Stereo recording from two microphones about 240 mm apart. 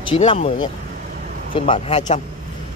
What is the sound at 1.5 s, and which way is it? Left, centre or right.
Speech, left.